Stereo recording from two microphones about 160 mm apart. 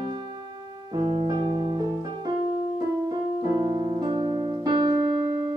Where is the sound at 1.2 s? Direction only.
30° right (ahead or behind).